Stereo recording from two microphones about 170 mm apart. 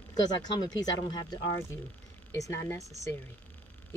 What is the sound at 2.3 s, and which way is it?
Speech, 20° left (ahead or behind).